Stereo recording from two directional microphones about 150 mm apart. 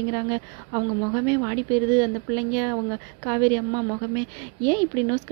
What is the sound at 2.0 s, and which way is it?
A woman's voice, 25° right (ahead or behind).